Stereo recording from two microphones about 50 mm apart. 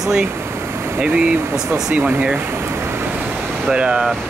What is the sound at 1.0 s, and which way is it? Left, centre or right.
Speech, right.